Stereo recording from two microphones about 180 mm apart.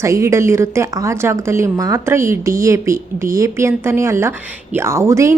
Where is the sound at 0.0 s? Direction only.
15° right (ahead or behind).